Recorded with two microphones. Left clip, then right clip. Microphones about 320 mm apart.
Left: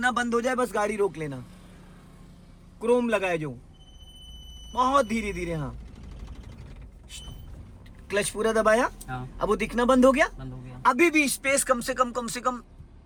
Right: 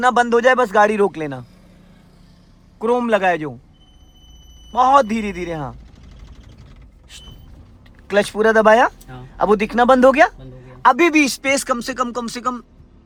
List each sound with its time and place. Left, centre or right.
0.0 s a man's voice: centre
2.8 s a man's voice: right
4.7 s a man's voice: right
8.0 s a man's voice: right; by 12.6 s centre